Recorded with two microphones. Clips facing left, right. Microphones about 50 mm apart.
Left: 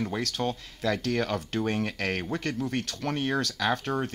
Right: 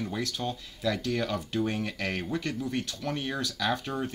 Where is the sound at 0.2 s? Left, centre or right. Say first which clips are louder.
Left 3 dB; left.